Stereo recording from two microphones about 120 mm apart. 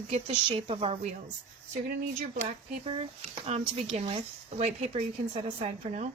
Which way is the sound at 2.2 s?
60° right (ahead or behind).